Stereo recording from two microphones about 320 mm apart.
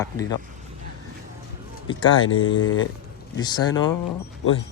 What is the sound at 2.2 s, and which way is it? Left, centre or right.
Speech, left.